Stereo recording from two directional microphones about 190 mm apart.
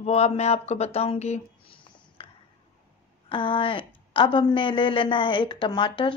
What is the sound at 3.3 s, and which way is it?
A woman's voice, 25° left (ahead or behind).